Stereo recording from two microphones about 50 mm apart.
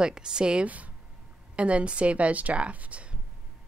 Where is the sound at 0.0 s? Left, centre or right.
Centre.